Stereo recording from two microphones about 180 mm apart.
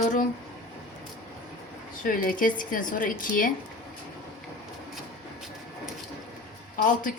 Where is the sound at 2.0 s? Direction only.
50° left (ahead or behind).